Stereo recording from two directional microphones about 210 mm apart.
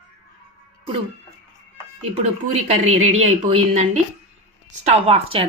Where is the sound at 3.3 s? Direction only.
30° right (ahead or behind).